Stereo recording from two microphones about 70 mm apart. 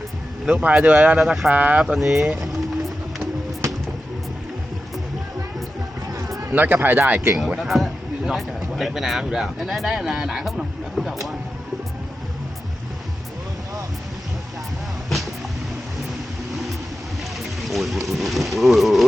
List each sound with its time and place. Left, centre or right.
0.4 s speech: centre
1.2 s speech: centre
1.5 s speech: centre
2.0 s vehicle: centre
6.1 s a sound: right
6.5 s speech: right
7.6 s speech: centre
16.5 s vehicle: centre
17.4 s speech: centre